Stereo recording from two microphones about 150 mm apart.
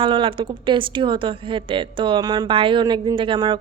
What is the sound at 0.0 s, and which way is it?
Speech, 35° right (ahead or behind).